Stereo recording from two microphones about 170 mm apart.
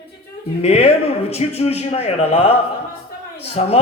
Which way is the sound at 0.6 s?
35° left (ahead or behind).